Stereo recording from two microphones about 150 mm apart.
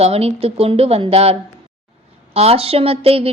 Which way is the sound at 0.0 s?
45° right (ahead or behind).